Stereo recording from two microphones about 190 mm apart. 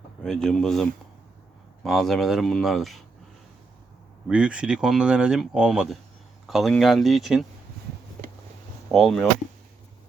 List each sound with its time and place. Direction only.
0.2 s speech: 5° left (ahead or behind)
4.3 s speech: 5° right (ahead or behind)
8.9 s speech: centre (ahead or behind)